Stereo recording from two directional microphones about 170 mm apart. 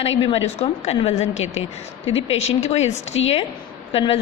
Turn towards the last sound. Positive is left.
turn(degrees=35)  # may be behind; listen again after turning